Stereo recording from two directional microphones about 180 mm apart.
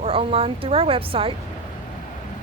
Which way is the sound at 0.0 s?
30° right (ahead or behind).